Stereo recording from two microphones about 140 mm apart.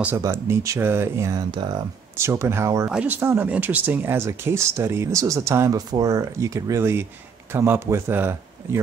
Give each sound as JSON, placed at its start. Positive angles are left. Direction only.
{"t": 0.2, "sound": "speech", "side_deg": -20}